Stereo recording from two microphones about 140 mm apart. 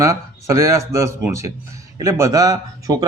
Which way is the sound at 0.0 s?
20° right (ahead or behind).